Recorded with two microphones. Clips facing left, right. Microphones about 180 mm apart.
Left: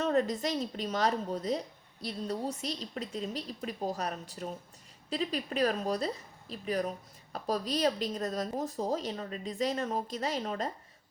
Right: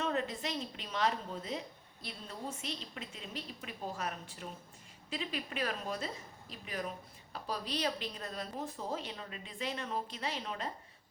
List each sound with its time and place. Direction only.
0.0 s a woman's voice: 40° left (ahead or behind)